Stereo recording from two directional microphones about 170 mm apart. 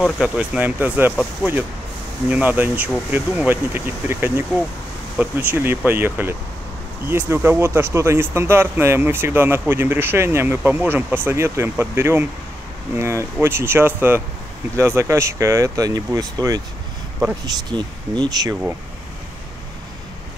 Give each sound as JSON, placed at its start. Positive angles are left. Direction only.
{"t": 0.0, "sound": "speech", "side_deg": -5}